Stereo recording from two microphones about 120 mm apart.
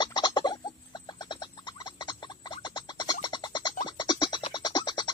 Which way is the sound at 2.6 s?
35° left (ahead or behind).